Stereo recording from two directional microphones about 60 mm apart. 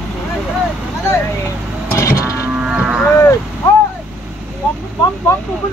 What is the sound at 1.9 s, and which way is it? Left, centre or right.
Vehicle, left.